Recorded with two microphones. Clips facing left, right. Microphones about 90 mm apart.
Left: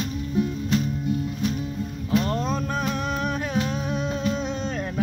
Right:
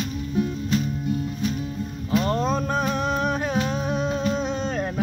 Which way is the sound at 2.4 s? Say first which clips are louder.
Right 3 dB; 20° right (ahead or behind).